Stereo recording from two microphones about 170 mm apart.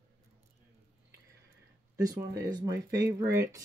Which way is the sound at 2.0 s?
20° right (ahead or behind).